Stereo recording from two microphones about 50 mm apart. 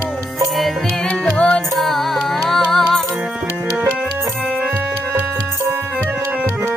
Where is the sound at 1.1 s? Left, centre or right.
Left.